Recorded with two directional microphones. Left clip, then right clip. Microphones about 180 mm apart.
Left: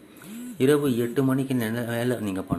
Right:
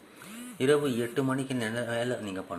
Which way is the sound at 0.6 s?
5° left (ahead or behind).